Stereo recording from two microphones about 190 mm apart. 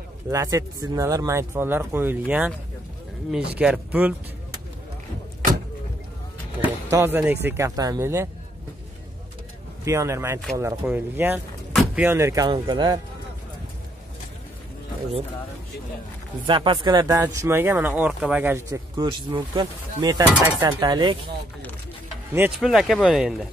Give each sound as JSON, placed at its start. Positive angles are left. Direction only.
{"t": 0.3, "sound": "a man's voice", "side_deg": -15}
{"t": 3.5, "sound": "a man's voice", "side_deg": -5}
{"t": 6.6, "sound": "a man's voice", "side_deg": -15}
{"t": 9.8, "sound": "a man's voice", "side_deg": -15}
{"t": 16.4, "sound": "a man's voice", "side_deg": -25}
{"t": 19.3, "sound": "speech", "side_deg": -20}
{"t": 22.3, "sound": "a man's voice", "side_deg": -10}